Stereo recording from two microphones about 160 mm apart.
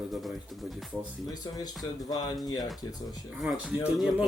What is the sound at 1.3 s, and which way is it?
Speech, 25° left (ahead or behind).